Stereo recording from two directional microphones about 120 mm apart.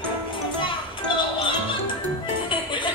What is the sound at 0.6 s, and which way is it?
Music, 40° left (ahead or behind).